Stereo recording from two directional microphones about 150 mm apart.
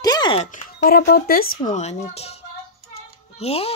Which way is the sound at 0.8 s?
90° left.